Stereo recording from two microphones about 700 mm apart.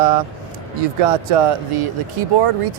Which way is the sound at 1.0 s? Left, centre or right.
Right.